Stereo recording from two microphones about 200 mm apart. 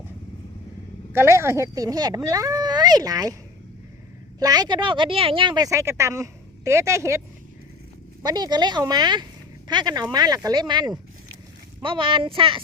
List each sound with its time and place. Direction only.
1.1 s speech: 15° right (ahead or behind)
4.4 s speech: 20° right (ahead or behind)
8.2 s speech: 20° right (ahead or behind)